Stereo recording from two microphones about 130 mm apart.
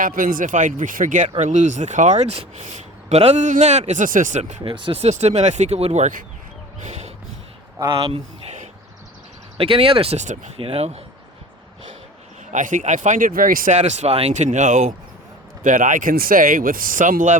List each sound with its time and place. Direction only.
0.0 s speech: 90° right
1.4 s speech: 70° right (ahead or behind)
4.6 s speech: 40° right (ahead or behind); by 6.2 s 75° right (ahead or behind)
6.8 s a sound: 60° right (ahead or behind)
7.9 s speech: 50° right (ahead or behind)
9.6 s speech: 45° right (ahead or behind); by 10.5 s 65° right (ahead or behind)
10.6 s speech: 50° right (ahead or behind)
12.5 s speech: 85° right
15.6 s speech: 85° right